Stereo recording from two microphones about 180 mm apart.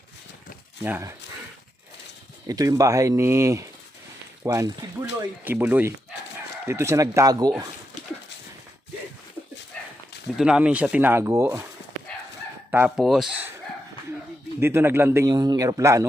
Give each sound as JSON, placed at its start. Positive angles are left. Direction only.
{"t": 0.8, "sound": "a man's voice", "side_deg": -10}
{"t": 2.5, "sound": "a man's voice", "side_deg": -20}
{"t": 9.7, "sound": "a sound", "side_deg": 5}
{"t": 10.2, "sound": "a man's voice", "side_deg": -5}
{"t": 12.7, "sound": "speech", "side_deg": -5}
{"t": 14.6, "sound": "a man's voice", "side_deg": -15}